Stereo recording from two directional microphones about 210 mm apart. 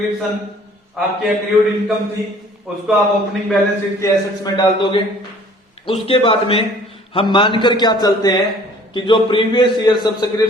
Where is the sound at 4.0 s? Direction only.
20° left (ahead or behind).